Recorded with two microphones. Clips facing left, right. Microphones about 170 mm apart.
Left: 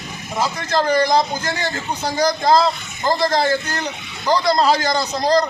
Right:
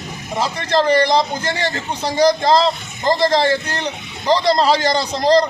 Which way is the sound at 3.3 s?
30° right (ahead or behind).